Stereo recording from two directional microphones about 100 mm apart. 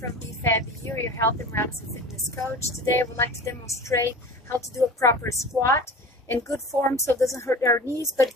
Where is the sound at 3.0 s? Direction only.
25° left (ahead or behind).